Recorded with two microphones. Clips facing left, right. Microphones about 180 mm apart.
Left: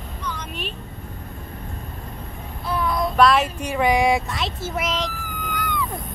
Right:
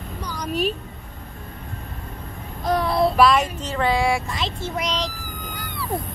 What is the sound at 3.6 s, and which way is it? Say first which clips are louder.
Speech: left 2 dB; 15° left (ahead or behind).